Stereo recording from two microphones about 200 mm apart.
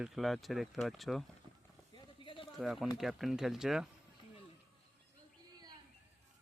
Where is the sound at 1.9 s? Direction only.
25° left (ahead or behind).